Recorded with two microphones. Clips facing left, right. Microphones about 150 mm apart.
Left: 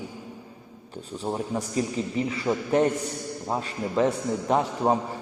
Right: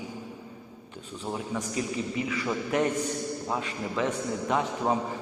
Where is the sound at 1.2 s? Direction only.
35° left (ahead or behind).